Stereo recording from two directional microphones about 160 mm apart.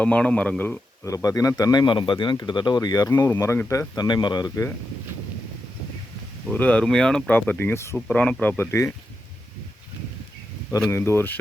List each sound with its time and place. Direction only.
0.0 s speech: 10° left (ahead or behind)
1.0 s speech: 20° left (ahead or behind)
6.5 s speech: 10° left (ahead or behind)
10.9 s speech: 15° left (ahead or behind)